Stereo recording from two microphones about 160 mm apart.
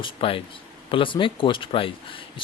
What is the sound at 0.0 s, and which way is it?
Speech, 35° left (ahead or behind).